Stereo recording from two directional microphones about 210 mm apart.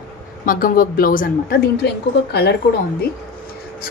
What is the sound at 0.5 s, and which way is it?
Speech, 40° left (ahead or behind).